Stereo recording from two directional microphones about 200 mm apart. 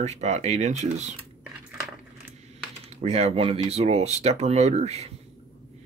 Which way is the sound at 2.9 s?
30° right (ahead or behind).